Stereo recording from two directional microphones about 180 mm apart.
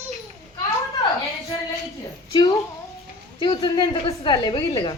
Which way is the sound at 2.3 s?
20° left (ahead or behind).